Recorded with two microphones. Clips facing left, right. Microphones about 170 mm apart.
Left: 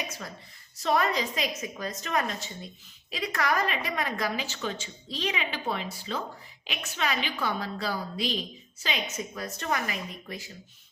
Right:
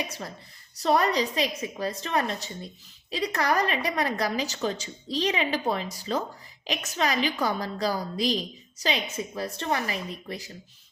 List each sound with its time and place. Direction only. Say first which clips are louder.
0.8 s a woman's voice: right 3 dB; 35° right (ahead or behind)